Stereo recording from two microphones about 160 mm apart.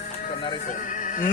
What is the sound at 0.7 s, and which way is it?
Speech, 55° left (ahead or behind).